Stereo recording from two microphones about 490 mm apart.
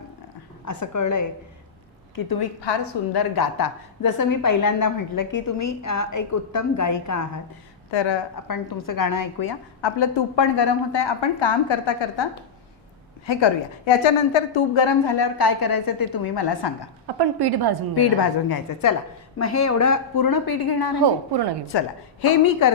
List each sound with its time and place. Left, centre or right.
0.6 s a woman's voice: left
2.6 s a woman's voice: left
3.3 s a woman's voice: left
7.9 s a woman's voice: left
8.9 s a woman's voice: left
10.0 s a woman's voice: left
17.2 s a woman's voice: right
17.9 s a woman's voice: left
21.0 s a woman's voice: right
21.7 s a woman's voice: left